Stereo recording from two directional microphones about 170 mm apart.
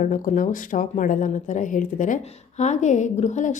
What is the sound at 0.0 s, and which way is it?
A woman's voice, 50° left (ahead or behind).